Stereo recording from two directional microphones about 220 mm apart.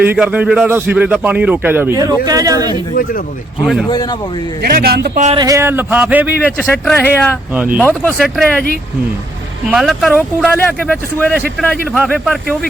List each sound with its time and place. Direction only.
0.0 s speech: 10° right (ahead or behind)
2.9 s speech: 40° left (ahead or behind)
3.8 s speech: 20° left (ahead or behind)
4.6 s a man's voice: 45° right (ahead or behind)
5.2 s speech: 25° right (ahead or behind)
5.5 s speech: 10° right (ahead or behind)
6.7 s speech: 10° left (ahead or behind)
9.6 s speech: centre (ahead or behind)